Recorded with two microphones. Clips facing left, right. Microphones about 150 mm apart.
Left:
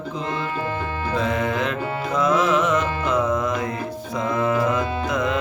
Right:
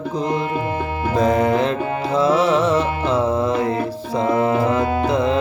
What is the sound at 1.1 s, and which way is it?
Music, 40° right (ahead or behind).